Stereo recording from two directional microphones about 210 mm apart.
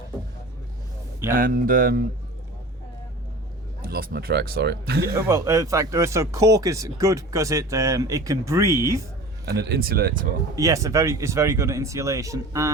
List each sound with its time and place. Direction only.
1.3 s speech: 40° right (ahead or behind)
3.8 s speech: 45° right (ahead or behind)
5.1 s speech: 15° right (ahead or behind)
9.5 s speech: 50° right (ahead or behind)
10.5 s speech: 15° right (ahead or behind)